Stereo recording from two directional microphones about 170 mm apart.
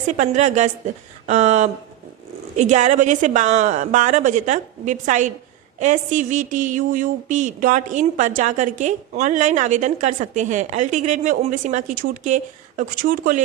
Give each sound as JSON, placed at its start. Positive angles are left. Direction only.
{"t": 0.2, "sound": "a woman's voice", "side_deg": -45}